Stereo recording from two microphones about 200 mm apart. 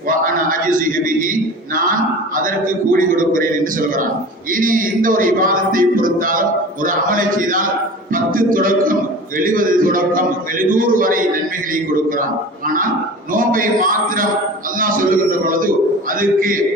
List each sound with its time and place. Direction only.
0.3 s a man's voice: 45° right (ahead or behind)